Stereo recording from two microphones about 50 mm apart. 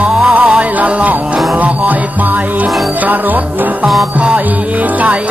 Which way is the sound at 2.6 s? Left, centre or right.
Right.